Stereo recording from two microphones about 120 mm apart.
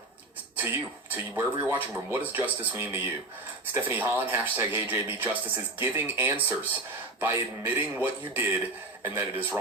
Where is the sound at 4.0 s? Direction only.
15° right (ahead or behind).